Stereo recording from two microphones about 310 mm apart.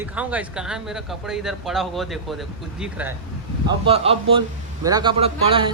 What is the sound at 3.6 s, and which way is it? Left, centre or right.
A man's voice, centre.